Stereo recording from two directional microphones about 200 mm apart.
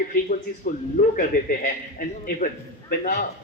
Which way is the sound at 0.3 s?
45° left (ahead or behind).